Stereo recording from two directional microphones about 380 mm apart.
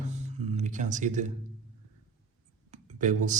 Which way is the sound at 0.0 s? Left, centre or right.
Centre.